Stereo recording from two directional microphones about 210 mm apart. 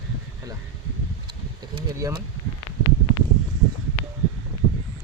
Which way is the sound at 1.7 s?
20° right (ahead or behind).